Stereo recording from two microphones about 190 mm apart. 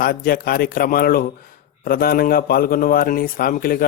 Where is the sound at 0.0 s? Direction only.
50° left (ahead or behind).